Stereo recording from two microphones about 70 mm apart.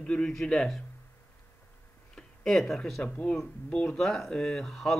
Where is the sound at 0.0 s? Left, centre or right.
Centre.